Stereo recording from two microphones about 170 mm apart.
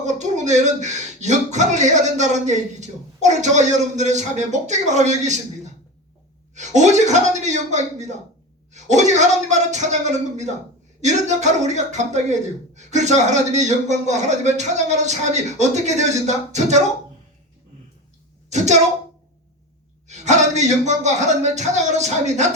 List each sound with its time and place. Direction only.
0.0 s a man's voice: 45° right (ahead or behind)
18.4 s a woman's voice: 45° right (ahead or behind)
20.1 s a man's voice: 45° right (ahead or behind)